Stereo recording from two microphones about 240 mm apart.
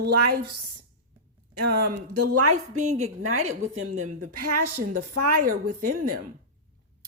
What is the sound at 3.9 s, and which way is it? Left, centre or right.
A woman's voice, right.